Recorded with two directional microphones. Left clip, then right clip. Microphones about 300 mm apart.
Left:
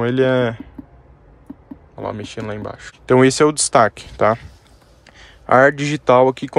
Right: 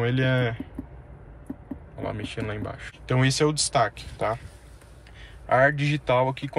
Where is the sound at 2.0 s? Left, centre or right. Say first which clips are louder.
Left 6 dB; centre.